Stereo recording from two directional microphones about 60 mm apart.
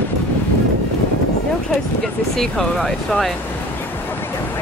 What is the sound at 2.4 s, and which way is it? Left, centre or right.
Speech, centre.